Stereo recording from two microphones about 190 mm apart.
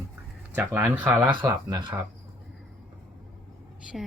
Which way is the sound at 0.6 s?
10° right (ahead or behind).